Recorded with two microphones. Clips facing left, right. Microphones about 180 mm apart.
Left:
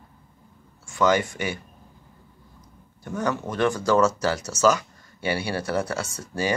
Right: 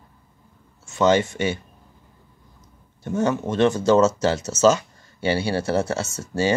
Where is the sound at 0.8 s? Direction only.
25° right (ahead or behind).